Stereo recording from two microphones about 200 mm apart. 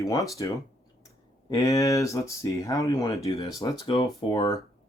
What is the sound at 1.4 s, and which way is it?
Speech, 15° left (ahead or behind).